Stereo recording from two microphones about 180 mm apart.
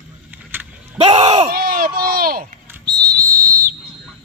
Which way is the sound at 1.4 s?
55° right (ahead or behind).